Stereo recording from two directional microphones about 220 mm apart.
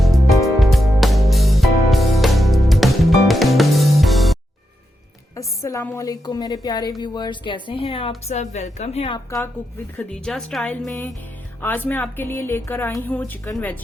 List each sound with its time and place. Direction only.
0.4 s music: centre (ahead or behind)
5.4 s a woman's voice: 15° left (ahead or behind)
10.0 s a woman's voice: 5° left (ahead or behind)